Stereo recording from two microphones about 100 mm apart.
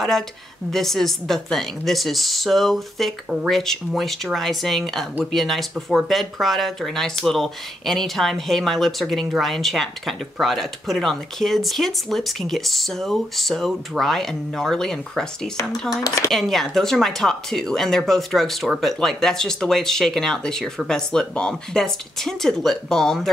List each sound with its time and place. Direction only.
0.7 s speech: 5° left (ahead or behind)
16.0 s speech: 40° left (ahead or behind)
16.3 s speech: 5° left (ahead or behind)